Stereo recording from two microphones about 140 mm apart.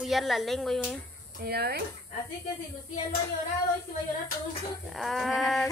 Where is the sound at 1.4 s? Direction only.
90° right.